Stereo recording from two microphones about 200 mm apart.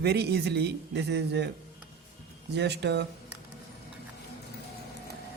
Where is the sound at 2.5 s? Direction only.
55° right (ahead or behind).